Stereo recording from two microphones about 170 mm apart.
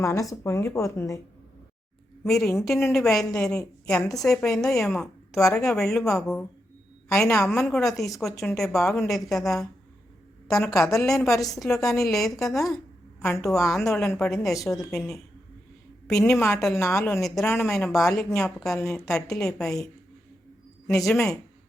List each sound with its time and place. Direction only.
0.0 s speech: 20° left (ahead or behind)
2.2 s a woman's voice: 5° left (ahead or behind)
10.8 s a woman's voice: centre (ahead or behind)
16.3 s speech: 10° left (ahead or behind)
17.2 s a woman's voice: centre (ahead or behind)
17.4 s speech: 15° left (ahead or behind)
17.7 s a woman's voice: centre (ahead or behind)
21.1 s a woman's voice: 5° left (ahead or behind)